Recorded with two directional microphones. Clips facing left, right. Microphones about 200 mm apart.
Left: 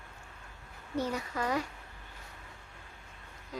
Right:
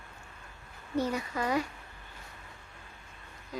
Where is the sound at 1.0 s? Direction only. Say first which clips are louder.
Right 2 dB; 10° right (ahead or behind).